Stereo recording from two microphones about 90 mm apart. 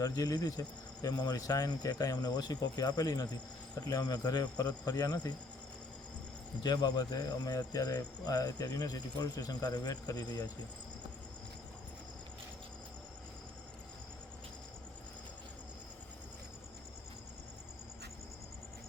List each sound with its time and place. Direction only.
0.0 s speech: 45° left (ahead or behind)
6.6 s speech: 50° left (ahead or behind)